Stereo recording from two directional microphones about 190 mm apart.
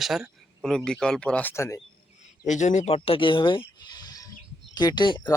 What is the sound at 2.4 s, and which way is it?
Speech, 40° left (ahead or behind).